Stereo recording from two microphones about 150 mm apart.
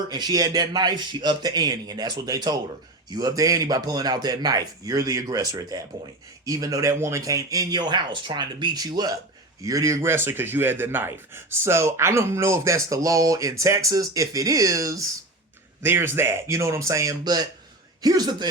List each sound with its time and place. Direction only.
0.1 s speech: 25° right (ahead or behind)